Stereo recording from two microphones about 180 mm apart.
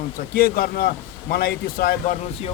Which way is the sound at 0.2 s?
55° left (ahead or behind).